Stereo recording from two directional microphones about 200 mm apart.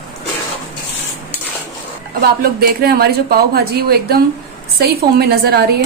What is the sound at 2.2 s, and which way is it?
Speech, 50° right (ahead or behind).